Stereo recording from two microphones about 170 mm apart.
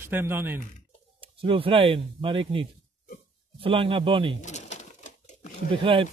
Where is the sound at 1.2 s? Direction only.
30° right (ahead or behind).